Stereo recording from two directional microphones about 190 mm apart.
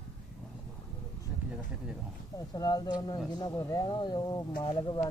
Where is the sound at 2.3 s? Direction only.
20° left (ahead or behind).